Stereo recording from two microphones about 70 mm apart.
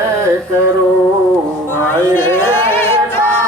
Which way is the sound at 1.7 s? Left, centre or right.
Left.